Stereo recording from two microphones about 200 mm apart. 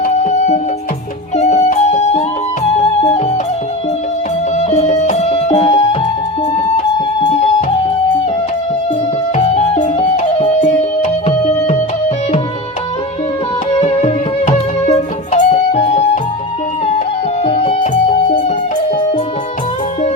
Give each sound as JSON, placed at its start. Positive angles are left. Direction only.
{"t": 0.0, "sound": "music", "side_deg": 35}
{"t": 4.5, "sound": "music", "side_deg": 35}
{"t": 9.3, "sound": "music", "side_deg": 30}
{"t": 13.7, "sound": "music", "side_deg": 30}
{"t": 17.4, "sound": "music", "side_deg": 30}